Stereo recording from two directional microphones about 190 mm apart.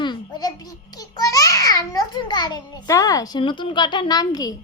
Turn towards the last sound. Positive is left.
turn(degrees=20)  # may be behind; listen again after turning